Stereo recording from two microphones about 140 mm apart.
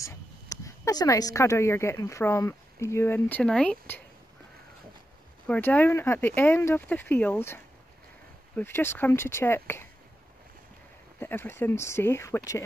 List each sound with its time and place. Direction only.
0.0 s speech: 20° left (ahead or behind)
5.5 s speech: 10° left (ahead or behind)
11.1 s speech: 15° left (ahead or behind)